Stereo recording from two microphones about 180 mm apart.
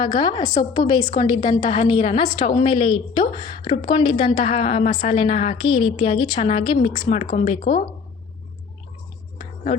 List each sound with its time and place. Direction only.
0.0 s a woman's voice: 25° left (ahead or behind)